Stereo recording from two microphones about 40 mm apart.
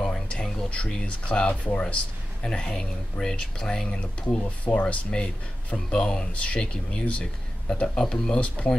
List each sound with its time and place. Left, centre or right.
0.3 s a sound: left
0.8 s speech: left
2.4 s speech: centre
8.0 s speech: centre